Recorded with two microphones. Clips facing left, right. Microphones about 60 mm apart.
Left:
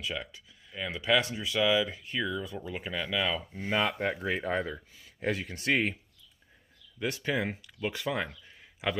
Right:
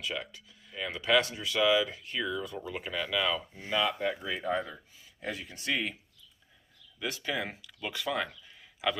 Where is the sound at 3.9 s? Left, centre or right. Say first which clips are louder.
Left 2 dB; left.